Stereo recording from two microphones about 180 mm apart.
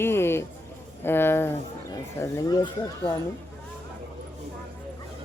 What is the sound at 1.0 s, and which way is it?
Speech, 10° left (ahead or behind).